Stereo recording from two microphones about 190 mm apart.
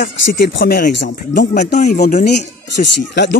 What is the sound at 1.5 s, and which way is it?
Speech, 40° left (ahead or behind).